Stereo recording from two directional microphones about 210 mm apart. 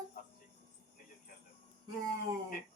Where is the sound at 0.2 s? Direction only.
45° left (ahead or behind).